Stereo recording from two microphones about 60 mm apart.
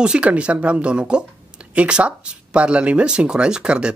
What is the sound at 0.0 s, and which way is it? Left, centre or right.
Speech, centre.